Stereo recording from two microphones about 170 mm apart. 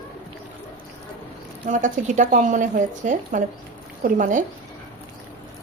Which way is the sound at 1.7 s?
50° right (ahead or behind).